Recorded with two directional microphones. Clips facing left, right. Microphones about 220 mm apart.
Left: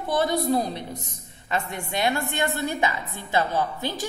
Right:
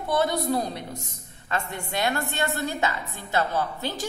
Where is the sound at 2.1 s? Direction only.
15° left (ahead or behind).